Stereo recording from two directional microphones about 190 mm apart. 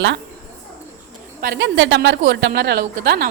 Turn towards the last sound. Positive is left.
turn(degrees=-60)  # may be behind; listen again after turning